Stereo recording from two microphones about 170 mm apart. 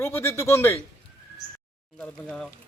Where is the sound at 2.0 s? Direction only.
5° left (ahead or behind).